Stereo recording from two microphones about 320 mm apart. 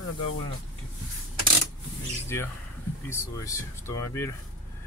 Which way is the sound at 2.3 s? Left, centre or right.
Centre.